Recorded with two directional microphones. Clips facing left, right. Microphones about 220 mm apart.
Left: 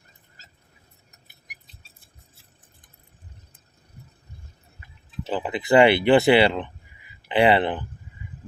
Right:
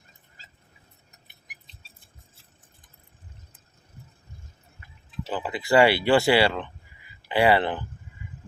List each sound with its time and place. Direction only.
5.2 s speech: 20° left (ahead or behind)